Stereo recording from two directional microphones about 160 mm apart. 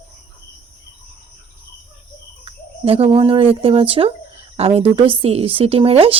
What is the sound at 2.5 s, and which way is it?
Speech, 35° right (ahead or behind).